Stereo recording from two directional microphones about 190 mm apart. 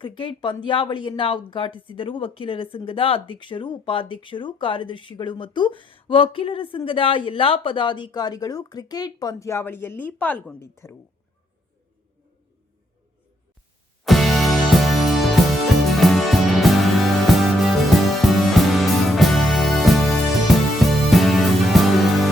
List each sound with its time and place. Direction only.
0.0 s speech: 25° left (ahead or behind)
14.0 s music: centre (ahead or behind)